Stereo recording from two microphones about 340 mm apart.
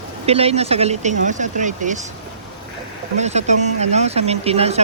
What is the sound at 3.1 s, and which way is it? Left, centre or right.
Speech, centre.